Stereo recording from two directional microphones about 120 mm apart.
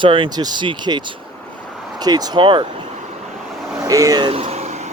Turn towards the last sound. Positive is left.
turn(degrees=-65)  # may be behind; listen again after turning